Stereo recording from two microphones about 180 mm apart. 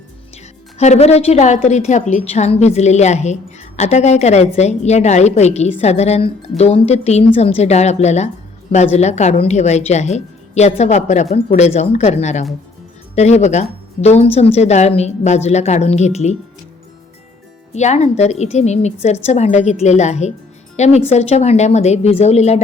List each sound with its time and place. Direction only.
0.8 s a woman's voice: 35° left (ahead or behind)
17.7 s a woman's voice: 40° left (ahead or behind)